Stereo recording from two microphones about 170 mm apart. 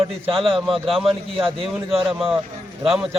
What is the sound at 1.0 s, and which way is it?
Speech, 35° right (ahead or behind).